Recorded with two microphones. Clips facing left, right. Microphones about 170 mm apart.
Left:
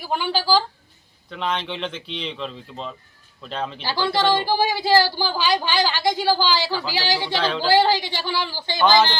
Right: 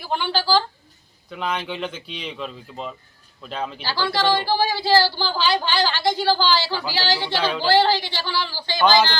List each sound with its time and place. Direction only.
0.0 s a woman's voice: 10° left (ahead or behind)
1.3 s a man's voice: 5° right (ahead or behind)
3.8 s a woman's voice: 20° left (ahead or behind)
7.3 s speech: 10° right (ahead or behind)
7.7 s a woman's voice: 15° left (ahead or behind)